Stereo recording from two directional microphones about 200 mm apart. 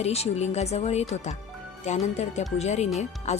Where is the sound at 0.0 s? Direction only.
30° left (ahead or behind).